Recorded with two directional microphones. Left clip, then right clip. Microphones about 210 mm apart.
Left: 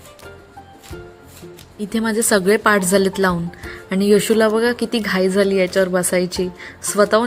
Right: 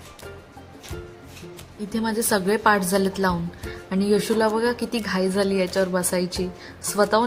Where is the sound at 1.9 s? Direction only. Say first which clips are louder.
Left 6 dB; 15° left (ahead or behind).